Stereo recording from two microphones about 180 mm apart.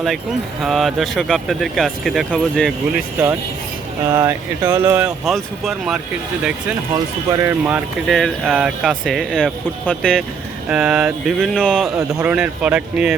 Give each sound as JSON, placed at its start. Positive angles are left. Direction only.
{"t": 0.6, "sound": "speech", "side_deg": 0}
{"t": 2.9, "sound": "speech", "side_deg": -10}
{"t": 7.3, "sound": "speech", "side_deg": -15}
{"t": 8.0, "sound": "speech", "side_deg": 0}
{"t": 11.9, "sound": "speech", "side_deg": -10}